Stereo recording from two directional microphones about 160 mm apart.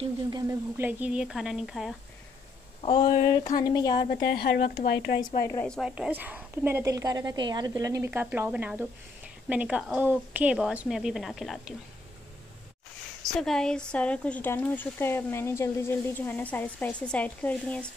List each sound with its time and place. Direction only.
0.3 s speech: 15° right (ahead or behind)
3.0 s a sound: 60° left (ahead or behind)
3.5 s a woman's voice: 25° left (ahead or behind)
4.2 s speech: 80° left
5.4 s speech: 15° left (ahead or behind)
5.7 s a woman's voice: 5° right (ahead or behind)
13.3 s speech: 5° left (ahead or behind)